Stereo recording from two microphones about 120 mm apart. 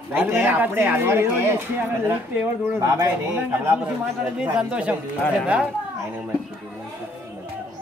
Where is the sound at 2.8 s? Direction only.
20° right (ahead or behind).